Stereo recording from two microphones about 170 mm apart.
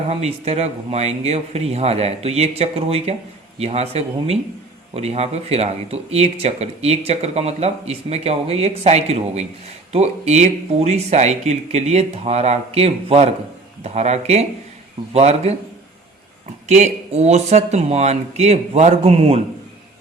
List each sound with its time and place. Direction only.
0.1 s speech: 40° right (ahead or behind)
16.6 s speech: 40° right (ahead or behind)